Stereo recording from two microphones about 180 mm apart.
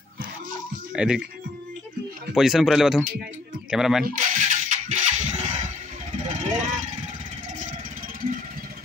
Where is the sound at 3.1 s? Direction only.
45° right (ahead or behind).